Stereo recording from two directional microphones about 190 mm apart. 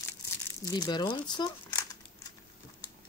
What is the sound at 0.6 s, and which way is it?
Speech, 20° left (ahead or behind).